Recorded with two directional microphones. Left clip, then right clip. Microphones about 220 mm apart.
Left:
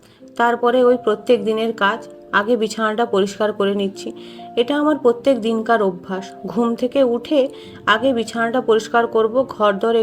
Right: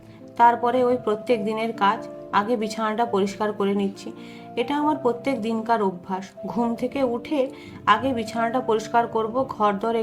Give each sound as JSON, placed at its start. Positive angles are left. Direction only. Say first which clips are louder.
{"t": 0.3, "sound": "speech", "louder": "left 2 dB", "side_deg": 15}